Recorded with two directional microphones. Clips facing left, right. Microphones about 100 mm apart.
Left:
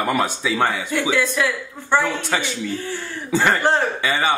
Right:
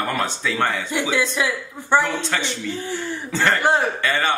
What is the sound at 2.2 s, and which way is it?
Speech, 10° left (ahead or behind).